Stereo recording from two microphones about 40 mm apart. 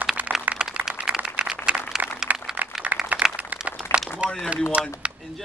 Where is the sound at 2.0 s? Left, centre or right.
Right.